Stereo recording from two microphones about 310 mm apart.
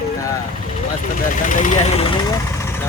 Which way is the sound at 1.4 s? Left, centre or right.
Left.